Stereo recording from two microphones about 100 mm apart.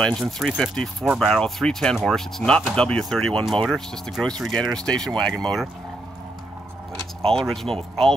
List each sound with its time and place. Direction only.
0.0 s speech: 5° left (ahead or behind)
7.2 s speech: 5° left (ahead or behind)